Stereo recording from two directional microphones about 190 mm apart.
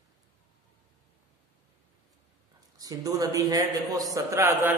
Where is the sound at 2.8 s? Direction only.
20° right (ahead or behind).